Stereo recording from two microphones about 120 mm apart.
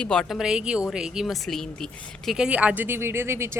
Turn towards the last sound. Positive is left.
turn(degrees=-20)  # may be behind; listen again after turning